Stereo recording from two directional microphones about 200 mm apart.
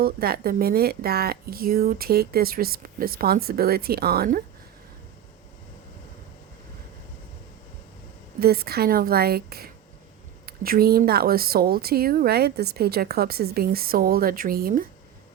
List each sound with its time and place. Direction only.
0.0 s speech: 50° right (ahead or behind)
8.4 s speech: 50° right (ahead or behind)